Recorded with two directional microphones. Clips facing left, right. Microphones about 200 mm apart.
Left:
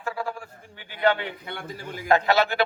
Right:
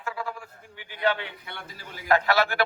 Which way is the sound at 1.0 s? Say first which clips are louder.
Left 4 dB; 50° left (ahead or behind).